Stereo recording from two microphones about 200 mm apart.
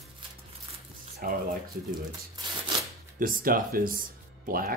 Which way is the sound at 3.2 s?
45° right (ahead or behind).